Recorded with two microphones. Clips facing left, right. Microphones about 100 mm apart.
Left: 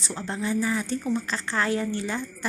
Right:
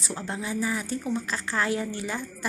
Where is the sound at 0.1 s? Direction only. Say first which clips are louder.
Left 3 dB; 10° right (ahead or behind).